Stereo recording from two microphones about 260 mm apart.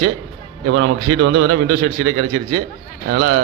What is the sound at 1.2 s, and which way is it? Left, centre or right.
Speech, right.